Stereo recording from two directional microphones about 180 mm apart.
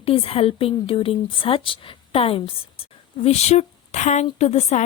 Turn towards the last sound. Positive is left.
turn(degrees=35)  # may be behind; listen again after turning